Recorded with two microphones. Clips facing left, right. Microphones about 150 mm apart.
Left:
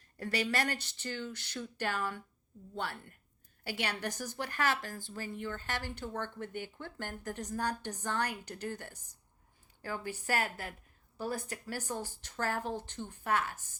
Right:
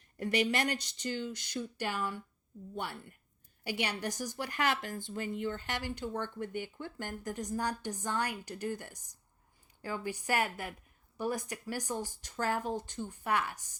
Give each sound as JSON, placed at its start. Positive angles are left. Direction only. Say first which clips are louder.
{"t": 0.2, "sound": "a woman's voice", "louder": "right 3 dB", "side_deg": -20}